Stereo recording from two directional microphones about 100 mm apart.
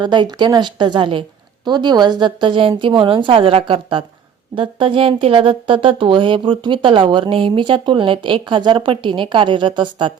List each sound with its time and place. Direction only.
0.0 s a woman's voice: 50° right (ahead or behind)